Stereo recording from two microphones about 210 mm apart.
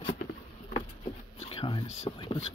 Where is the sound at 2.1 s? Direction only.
25° left (ahead or behind).